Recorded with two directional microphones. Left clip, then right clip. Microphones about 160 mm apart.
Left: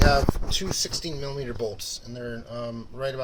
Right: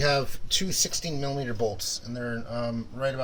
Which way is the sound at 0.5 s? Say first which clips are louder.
Right 6 dB; 45° left (ahead or behind).